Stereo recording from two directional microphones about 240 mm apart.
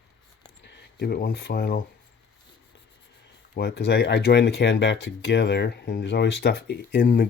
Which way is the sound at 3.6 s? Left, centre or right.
Left.